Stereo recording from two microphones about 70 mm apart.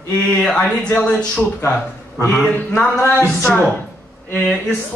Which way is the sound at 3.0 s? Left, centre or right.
Left.